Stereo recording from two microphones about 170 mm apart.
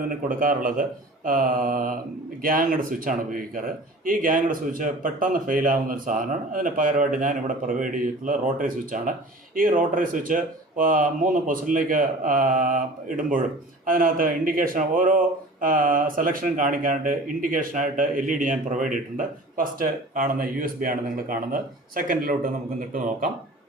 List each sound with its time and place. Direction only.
0.1 s speech: 55° right (ahead or behind)